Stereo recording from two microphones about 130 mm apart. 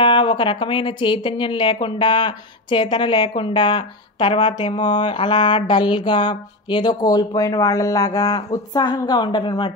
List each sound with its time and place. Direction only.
0.0 s speech: 40° left (ahead or behind)